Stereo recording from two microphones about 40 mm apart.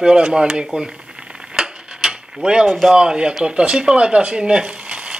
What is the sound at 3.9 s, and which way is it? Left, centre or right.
Frying, right.